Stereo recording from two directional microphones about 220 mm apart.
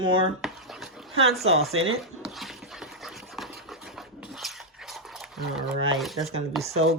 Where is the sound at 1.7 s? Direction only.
70° right (ahead or behind).